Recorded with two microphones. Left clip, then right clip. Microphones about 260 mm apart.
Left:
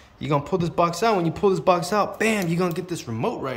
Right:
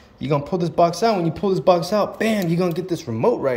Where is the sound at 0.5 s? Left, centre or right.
Centre.